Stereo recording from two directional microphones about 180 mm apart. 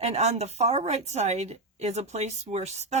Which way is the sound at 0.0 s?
35° right (ahead or behind).